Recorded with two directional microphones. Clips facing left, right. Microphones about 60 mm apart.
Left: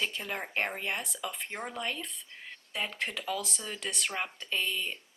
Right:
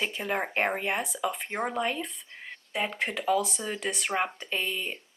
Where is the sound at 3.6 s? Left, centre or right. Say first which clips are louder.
Right 4 dB; right.